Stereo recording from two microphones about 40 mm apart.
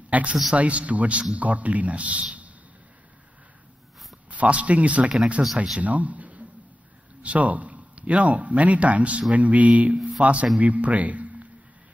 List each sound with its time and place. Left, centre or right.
0.1 s a man's voice: right
4.3 s a man's voice: right
5.8 s a man's voice: right